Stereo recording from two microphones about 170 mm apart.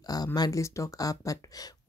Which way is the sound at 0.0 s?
20° left (ahead or behind).